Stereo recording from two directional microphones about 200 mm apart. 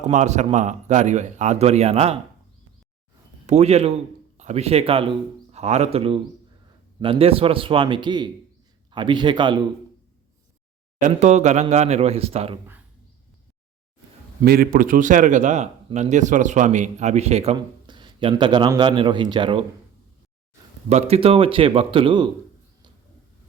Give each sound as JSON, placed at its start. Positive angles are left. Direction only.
{"t": 0.0, "sound": "speech", "side_deg": -35}
{"t": 3.4, "sound": "a man's voice", "side_deg": -35}
{"t": 11.0, "sound": "speech", "side_deg": -35}
{"t": 14.4, "sound": "speech", "side_deg": -50}
{"t": 20.9, "sound": "speech", "side_deg": -30}